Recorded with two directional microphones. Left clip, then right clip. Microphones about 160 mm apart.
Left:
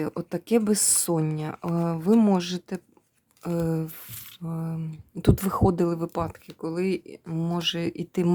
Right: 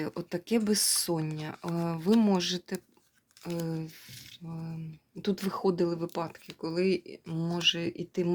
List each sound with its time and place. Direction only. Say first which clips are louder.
0.0 s speech: left 5 dB; 30° left (ahead or behind)
3.4 s speech: left 8 dB; 40° left (ahead or behind)
6.1 s speech: left 5 dB; 25° left (ahead or behind); by 8.3 s 45° left (ahead or behind)